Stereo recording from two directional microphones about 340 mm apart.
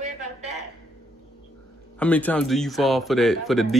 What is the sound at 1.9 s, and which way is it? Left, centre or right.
A man's voice, centre.